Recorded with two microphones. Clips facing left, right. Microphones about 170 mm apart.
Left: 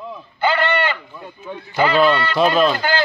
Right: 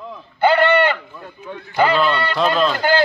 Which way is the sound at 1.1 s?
10° left (ahead or behind).